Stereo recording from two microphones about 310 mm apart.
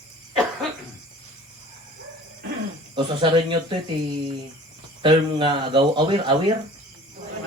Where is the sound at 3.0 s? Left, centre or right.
Centre.